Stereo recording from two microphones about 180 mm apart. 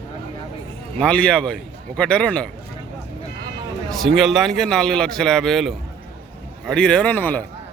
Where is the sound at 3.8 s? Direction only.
Centre (ahead or behind).